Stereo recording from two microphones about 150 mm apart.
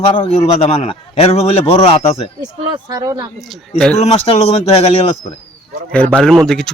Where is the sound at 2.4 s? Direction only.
30° right (ahead or behind).